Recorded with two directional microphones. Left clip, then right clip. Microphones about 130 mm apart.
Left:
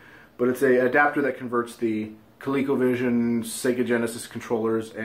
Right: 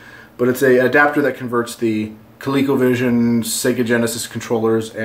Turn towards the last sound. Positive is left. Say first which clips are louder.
# right 8 dB
turn(degrees=-20)  # may be behind; listen again after turning